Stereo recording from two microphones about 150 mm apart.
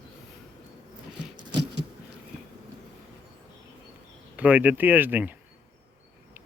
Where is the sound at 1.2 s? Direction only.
30° right (ahead or behind).